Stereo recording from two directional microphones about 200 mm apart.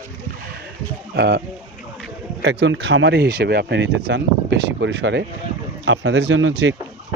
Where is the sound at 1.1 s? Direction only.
55° right (ahead or behind).